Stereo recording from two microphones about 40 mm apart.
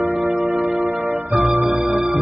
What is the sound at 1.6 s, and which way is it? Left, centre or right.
Music, right.